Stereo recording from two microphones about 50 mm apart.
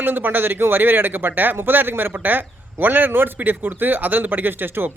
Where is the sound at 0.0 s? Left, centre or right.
Right.